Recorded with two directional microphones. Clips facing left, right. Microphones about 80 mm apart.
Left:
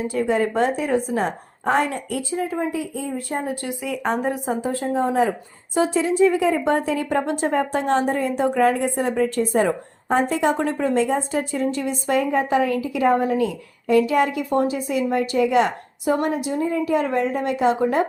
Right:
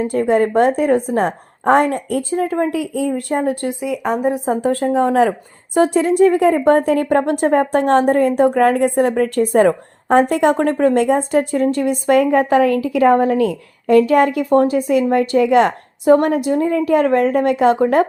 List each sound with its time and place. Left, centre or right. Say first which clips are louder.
0.0 s a woman's voice: right 6 dB; right
3.7 s speech: right 6 dB; right
3.9 s a woman's voice: right 3 dB; centre
4.7 s a woman's voice: right 6 dB; right
5.7 s a woman's voice: right 6 dB; right
12.9 s a woman's voice: right 5 dB; right